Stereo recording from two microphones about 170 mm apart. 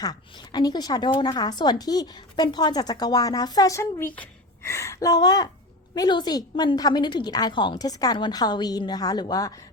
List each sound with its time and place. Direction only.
0.0 s a woman's voice: 25° left (ahead or behind)